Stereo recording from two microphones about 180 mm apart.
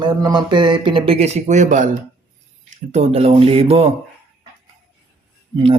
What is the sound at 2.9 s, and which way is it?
Speech, 35° right (ahead or behind).